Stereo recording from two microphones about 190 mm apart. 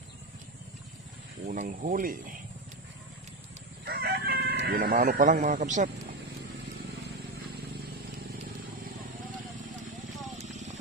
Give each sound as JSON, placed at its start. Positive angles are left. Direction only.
{"t": 1.4, "sound": "speech", "side_deg": -45}
{"t": 3.8, "sound": "chicken", "side_deg": -55}
{"t": 10.3, "sound": "vehicle", "side_deg": -35}